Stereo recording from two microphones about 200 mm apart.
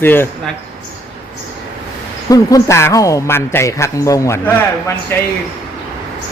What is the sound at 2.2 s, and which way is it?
Speech, 15° left (ahead or behind).